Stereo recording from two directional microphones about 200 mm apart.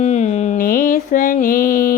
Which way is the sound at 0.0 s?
35° left (ahead or behind).